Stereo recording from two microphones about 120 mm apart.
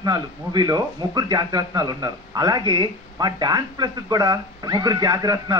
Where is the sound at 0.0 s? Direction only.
35° right (ahead or behind).